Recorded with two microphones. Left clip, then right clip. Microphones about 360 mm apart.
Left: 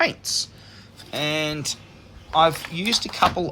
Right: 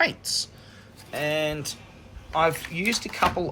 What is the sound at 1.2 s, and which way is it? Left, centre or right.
Speech, left.